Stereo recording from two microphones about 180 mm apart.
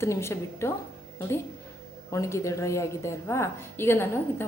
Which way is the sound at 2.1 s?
15° left (ahead or behind).